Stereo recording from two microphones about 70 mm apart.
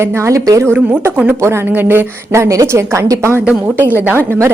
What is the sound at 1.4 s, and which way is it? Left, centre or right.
Speech, right.